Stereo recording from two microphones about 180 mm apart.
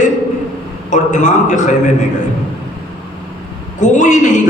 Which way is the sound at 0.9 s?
45° left (ahead or behind).